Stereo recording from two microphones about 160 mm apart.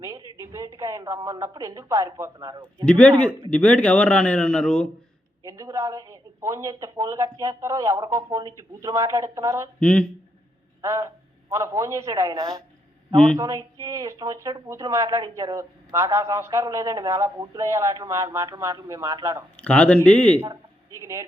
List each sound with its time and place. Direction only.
0.2 s a sound: 25° left (ahead or behind)
0.8 s speech: 20° right (ahead or behind)
2.8 s a man's voice: 5° left (ahead or behind)
5.5 s speech: 20° right (ahead or behind)
9.8 s a man's voice: 5° left (ahead or behind)
10.8 s a man's voice: 20° right (ahead or behind)
19.5 s a man's voice: 10° left (ahead or behind)
21.0 s speech: 20° right (ahead or behind)